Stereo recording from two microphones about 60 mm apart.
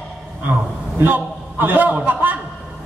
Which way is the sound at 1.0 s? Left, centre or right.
Right.